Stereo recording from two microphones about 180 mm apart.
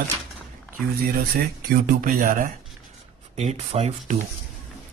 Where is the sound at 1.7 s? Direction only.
50° right (ahead or behind).